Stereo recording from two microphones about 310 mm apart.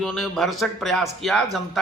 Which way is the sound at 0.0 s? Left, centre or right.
Centre.